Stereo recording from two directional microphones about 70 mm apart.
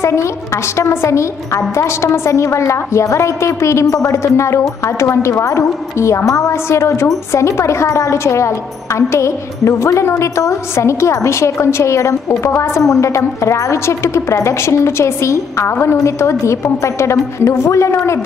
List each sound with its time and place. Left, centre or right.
0.0 s a woman's voice: left